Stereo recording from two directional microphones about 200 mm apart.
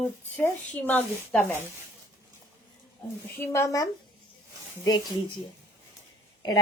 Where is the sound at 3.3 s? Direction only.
10° left (ahead or behind).